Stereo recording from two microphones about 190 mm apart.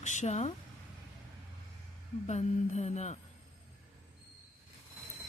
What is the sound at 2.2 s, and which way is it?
Speech, 35° left (ahead or behind).